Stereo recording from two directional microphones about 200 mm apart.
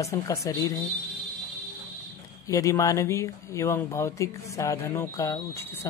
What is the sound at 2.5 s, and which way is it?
Speech, 15° left (ahead or behind).